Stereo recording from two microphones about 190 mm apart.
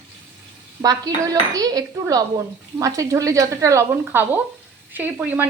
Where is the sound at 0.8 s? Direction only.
20° right (ahead or behind).